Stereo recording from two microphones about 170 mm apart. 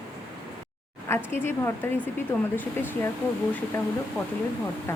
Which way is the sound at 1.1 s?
15° left (ahead or behind).